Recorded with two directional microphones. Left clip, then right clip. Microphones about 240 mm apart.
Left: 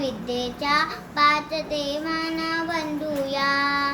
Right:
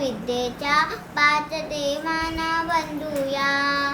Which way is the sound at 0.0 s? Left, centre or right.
Centre.